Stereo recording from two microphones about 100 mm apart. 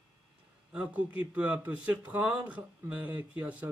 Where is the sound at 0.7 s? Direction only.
10° right (ahead or behind).